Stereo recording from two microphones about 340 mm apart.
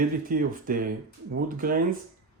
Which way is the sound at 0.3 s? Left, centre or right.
Right.